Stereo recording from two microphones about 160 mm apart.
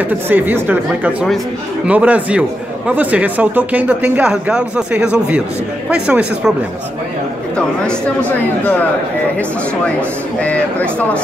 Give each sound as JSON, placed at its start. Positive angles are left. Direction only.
{"t": 0.0, "sound": "speech", "side_deg": -10}
{"t": 7.5, "sound": "speech", "side_deg": 5}
{"t": 10.4, "sound": "speech", "side_deg": 10}